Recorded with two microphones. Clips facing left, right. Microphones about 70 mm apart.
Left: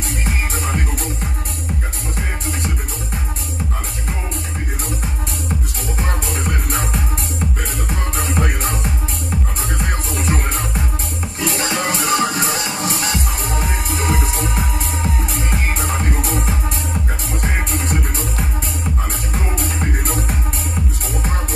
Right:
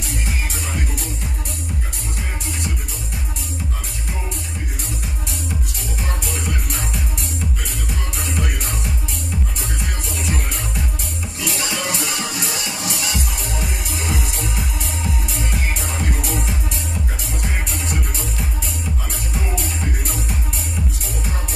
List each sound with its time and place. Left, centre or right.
0.2 s music: left
5.9 s music: left
19.3 s music: left